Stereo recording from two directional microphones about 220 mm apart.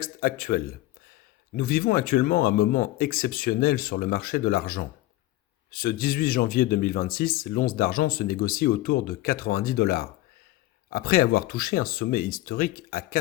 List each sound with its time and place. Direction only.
0.0 s speech: 40° left (ahead or behind)